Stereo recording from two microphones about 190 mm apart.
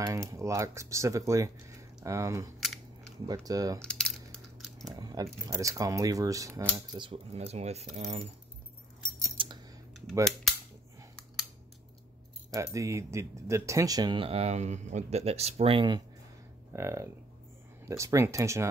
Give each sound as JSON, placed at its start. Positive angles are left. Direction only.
{"t": 0.0, "sound": "speech", "side_deg": -15}
{"t": 2.6, "sound": "camera", "side_deg": 0}
{"t": 3.4, "sound": "speech", "side_deg": -20}
{"t": 3.8, "sound": "crushing", "side_deg": 5}
{"t": 4.8, "sound": "speech", "side_deg": -20}
{"t": 9.4, "sound": "scissors", "side_deg": -25}
{"t": 12.5, "sound": "speech", "side_deg": -15}
{"t": 16.7, "sound": "speech", "side_deg": -15}